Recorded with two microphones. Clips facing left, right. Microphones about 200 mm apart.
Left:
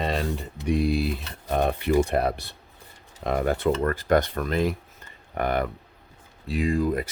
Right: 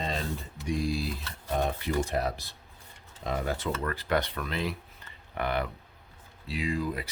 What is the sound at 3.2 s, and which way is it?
Speech, 60° left (ahead or behind).